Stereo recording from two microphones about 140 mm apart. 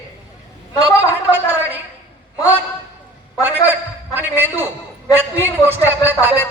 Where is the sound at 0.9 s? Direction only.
15° right (ahead or behind).